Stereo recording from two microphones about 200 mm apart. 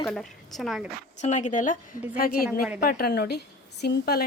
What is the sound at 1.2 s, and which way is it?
A woman's voice, 35° left (ahead or behind).